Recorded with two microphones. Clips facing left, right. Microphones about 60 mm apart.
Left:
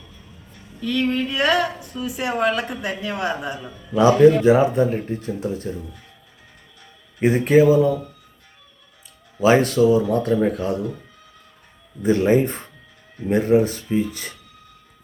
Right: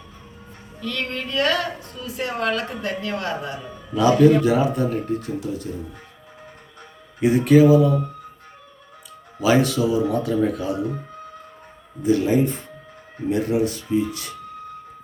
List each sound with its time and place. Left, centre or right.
0.8 s a woman's voice: centre
3.9 s speech: left
7.2 s speech: left
9.4 s speech: left
12.0 s speech: left